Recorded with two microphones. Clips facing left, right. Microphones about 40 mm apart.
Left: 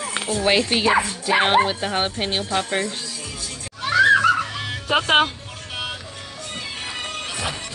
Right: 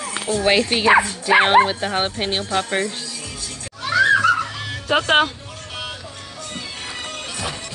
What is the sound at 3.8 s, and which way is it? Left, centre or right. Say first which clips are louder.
Music: even; centre.